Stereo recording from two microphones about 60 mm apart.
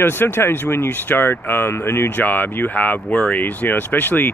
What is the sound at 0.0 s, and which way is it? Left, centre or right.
Speech, left.